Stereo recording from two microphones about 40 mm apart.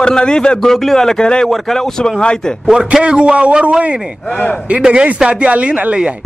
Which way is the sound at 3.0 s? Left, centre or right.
Right.